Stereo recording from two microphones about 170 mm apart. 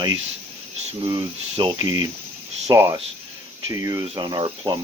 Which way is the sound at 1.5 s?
25° right (ahead or behind).